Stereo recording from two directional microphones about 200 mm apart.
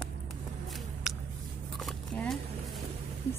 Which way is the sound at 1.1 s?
Centre (ahead or behind).